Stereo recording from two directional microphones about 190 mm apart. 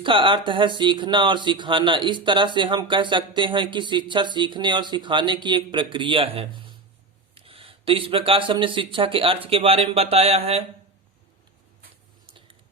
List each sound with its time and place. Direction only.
0.0 s speech: 25° right (ahead or behind)